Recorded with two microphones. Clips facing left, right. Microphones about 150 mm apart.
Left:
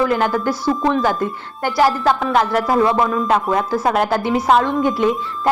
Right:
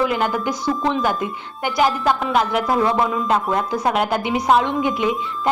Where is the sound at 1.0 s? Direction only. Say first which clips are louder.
Left 3 dB; 15° right (ahead or behind).